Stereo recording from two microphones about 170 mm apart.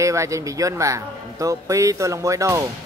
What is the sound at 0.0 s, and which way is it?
A man's voice, 20° right (ahead or behind).